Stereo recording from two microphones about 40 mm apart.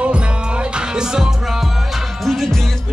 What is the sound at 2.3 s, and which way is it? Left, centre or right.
Music, centre.